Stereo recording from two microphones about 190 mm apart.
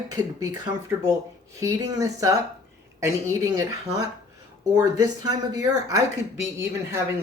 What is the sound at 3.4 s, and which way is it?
Speech, 20° right (ahead or behind).